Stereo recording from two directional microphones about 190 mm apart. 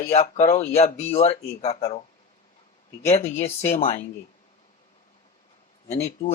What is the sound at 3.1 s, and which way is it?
Speech, 30° left (ahead or behind).